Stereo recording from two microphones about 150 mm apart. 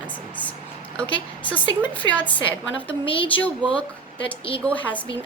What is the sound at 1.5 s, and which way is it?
Speech, 10° left (ahead or behind).